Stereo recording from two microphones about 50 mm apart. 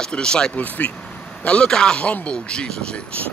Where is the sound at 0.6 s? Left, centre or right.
Left.